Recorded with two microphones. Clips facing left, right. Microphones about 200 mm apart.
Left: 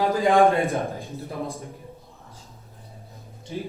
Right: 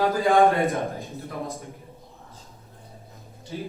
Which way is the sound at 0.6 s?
30° left (ahead or behind).